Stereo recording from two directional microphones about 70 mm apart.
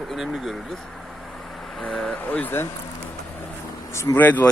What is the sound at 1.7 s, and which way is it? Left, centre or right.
Speech, centre.